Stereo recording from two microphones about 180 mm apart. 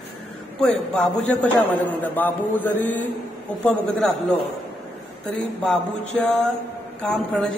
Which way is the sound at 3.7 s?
Centre (ahead or behind).